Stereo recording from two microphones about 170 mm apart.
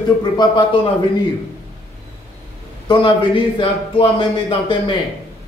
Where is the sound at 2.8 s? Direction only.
30° left (ahead or behind).